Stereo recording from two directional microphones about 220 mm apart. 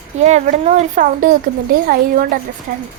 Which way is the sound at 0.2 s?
30° right (ahead or behind).